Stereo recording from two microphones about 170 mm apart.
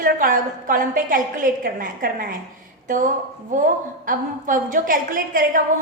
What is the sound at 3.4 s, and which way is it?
A woman's voice, 50° right (ahead or behind).